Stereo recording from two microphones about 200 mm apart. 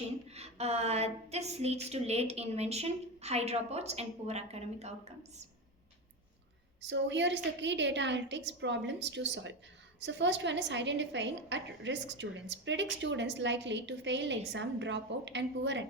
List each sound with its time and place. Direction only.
0.3 s a woman's voice: 30° right (ahead or behind)
6.8 s a woman's voice: 60° right (ahead or behind)